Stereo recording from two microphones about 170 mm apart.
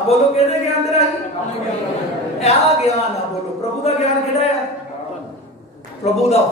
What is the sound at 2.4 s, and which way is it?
Speech, 40° left (ahead or behind).